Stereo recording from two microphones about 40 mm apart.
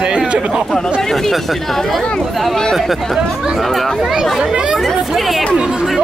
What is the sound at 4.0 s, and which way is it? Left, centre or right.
Speech, centre.